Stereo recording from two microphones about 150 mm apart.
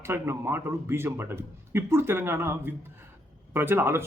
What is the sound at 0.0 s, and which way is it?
A man's voice, 15° right (ahead or behind).